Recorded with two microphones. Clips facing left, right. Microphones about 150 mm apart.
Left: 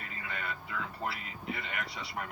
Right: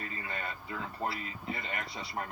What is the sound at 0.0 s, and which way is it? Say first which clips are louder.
A man's voice: right 2 dB; 35° right (ahead or behind).